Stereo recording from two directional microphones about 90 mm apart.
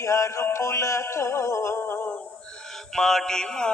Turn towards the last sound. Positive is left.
turn(degrees=10)  # may be behind; listen again after turning